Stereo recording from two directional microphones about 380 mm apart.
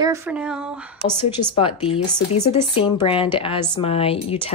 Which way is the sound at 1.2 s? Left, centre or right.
Centre.